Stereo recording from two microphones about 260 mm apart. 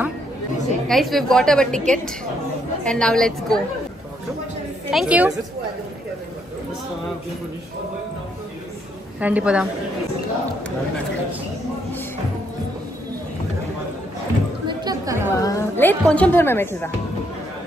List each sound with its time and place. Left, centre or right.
0.8 s a woman's voice: centre
4.9 s a woman's voice: centre
9.2 s a woman's voice: centre
14.7 s chatter: centre
15.3 s a woman's voice: centre